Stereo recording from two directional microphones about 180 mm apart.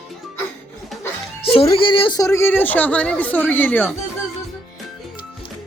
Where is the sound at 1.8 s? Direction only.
30° left (ahead or behind).